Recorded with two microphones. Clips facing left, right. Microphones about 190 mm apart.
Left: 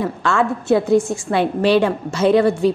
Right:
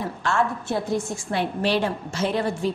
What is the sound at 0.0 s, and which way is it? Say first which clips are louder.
A woman's voice: left 5 dB; 85° left.